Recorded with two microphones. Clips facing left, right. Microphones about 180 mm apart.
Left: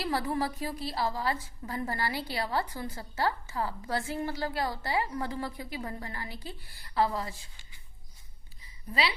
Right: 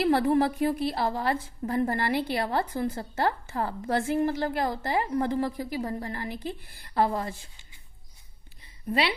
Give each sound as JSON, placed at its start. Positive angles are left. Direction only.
{"t": 0.0, "sound": "a woman's voice", "side_deg": -55}
{"t": 6.9, "sound": "a woman's voice", "side_deg": -50}
{"t": 8.9, "sound": "a woman's voice", "side_deg": -55}